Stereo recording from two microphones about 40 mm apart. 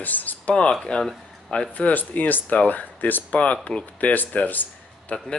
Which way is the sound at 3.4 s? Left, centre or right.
Left.